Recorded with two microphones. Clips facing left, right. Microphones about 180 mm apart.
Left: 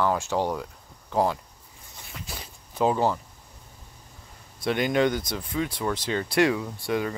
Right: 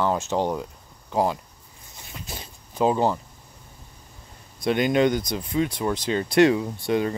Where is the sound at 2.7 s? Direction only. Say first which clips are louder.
Right 2 dB; 20° right (ahead or behind).